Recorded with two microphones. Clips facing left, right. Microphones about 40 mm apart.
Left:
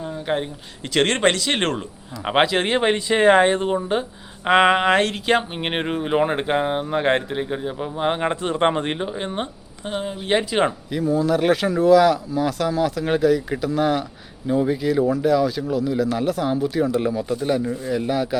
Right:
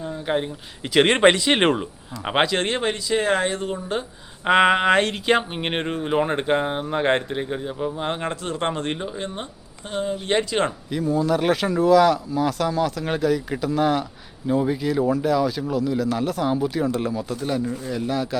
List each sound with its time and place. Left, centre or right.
0.0 s a sound: centre
0.9 s speech: centre
2.2 s speech: centre
2.8 s speech: left
4.4 s speech: centre; by 9.5 s left
9.9 s speech: centre